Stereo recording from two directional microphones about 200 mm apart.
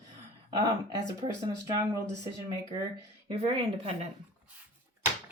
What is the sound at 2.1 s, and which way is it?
Speech, 15° right (ahead or behind).